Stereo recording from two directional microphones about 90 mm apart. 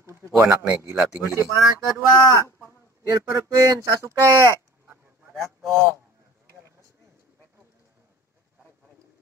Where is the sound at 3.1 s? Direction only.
40° right (ahead or behind).